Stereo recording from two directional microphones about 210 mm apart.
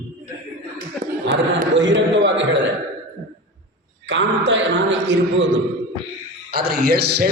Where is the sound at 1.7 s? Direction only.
55° right (ahead or behind).